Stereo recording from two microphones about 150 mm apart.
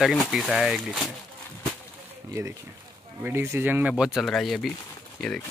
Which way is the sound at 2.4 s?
20° right (ahead or behind).